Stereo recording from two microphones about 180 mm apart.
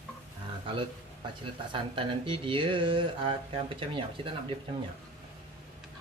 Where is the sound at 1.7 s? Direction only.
30° right (ahead or behind).